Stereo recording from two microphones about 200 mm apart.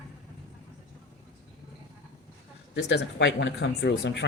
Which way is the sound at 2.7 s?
60° left (ahead or behind).